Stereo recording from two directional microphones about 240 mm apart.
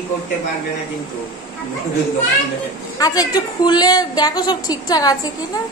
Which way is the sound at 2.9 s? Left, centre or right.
Centre.